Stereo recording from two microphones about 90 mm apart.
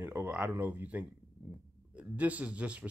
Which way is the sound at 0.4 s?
20° right (ahead or behind).